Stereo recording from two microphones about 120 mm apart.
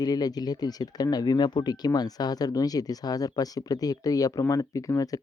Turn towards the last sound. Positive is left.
turn(degrees=30)  # may be behind; listen again after turning